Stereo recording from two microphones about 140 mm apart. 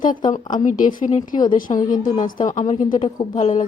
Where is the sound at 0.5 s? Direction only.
65° left (ahead or behind).